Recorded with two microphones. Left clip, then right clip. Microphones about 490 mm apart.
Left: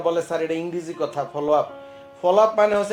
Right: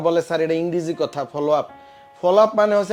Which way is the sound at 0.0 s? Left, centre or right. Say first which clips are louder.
Right 3 dB; right.